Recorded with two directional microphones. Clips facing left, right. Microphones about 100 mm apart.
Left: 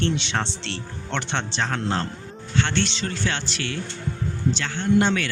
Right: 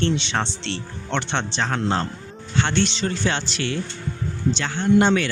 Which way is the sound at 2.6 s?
20° right (ahead or behind).